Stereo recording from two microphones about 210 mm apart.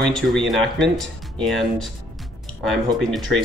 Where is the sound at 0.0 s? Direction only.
Centre (ahead or behind).